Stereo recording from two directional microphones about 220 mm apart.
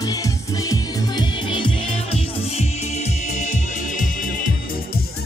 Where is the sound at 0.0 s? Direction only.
15° left (ahead or behind); by 4.1 s 35° left (ahead or behind).